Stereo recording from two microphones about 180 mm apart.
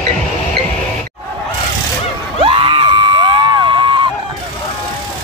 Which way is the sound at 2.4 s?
30° right (ahead or behind).